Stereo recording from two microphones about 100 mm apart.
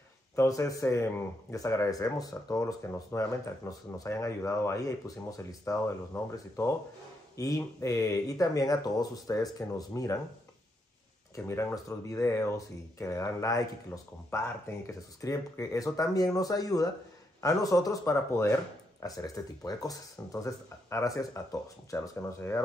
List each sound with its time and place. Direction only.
0.4 s speech: 35° left (ahead or behind)
11.3 s speech: 25° left (ahead or behind)